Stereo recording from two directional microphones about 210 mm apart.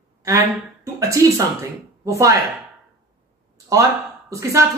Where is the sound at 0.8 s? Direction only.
15° right (ahead or behind).